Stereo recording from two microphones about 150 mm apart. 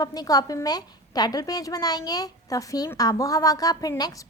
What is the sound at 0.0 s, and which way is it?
A woman's voice, 25° left (ahead or behind).